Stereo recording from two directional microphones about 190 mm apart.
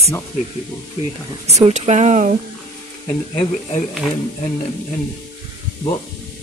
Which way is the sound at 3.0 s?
30° left (ahead or behind).